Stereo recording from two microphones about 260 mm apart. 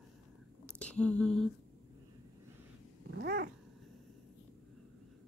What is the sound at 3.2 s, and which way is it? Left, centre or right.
Cat, right.